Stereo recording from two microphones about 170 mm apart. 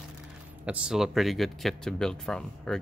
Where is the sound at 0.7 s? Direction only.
5° right (ahead or behind).